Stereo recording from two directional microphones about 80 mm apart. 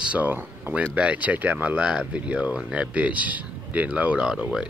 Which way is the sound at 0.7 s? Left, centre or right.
Centre.